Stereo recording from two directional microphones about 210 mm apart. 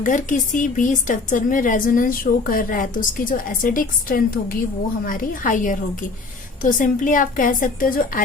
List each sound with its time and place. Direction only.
0.0 s a woman's voice: 40° left (ahead or behind)